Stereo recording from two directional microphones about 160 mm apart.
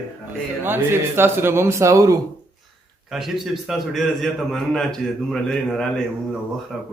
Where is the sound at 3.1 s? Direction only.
Centre (ahead or behind).